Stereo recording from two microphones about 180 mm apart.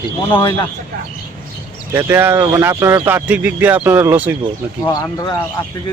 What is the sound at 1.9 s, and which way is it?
Speech, 10° right (ahead or behind).